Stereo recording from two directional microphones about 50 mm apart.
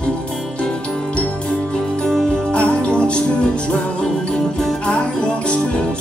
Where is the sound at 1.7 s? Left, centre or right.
Centre.